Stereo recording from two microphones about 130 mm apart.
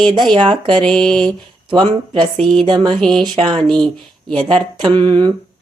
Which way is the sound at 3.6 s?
5° left (ahead or behind).